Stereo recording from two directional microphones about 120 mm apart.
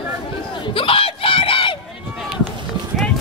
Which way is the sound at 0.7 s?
50° left (ahead or behind).